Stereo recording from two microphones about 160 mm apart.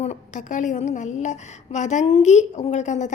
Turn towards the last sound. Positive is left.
turn(degrees=50)  # may be behind; listen again after turning